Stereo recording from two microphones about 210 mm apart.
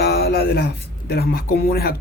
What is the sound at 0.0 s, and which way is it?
Speech, 50° left (ahead or behind).